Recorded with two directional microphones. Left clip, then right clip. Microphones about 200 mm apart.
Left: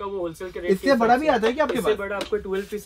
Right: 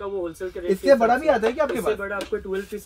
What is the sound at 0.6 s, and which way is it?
Speech, centre (ahead or behind).